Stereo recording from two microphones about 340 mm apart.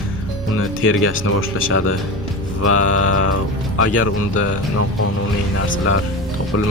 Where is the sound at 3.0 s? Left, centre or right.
Left.